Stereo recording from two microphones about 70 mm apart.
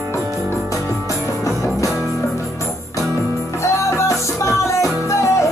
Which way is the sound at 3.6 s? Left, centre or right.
Left.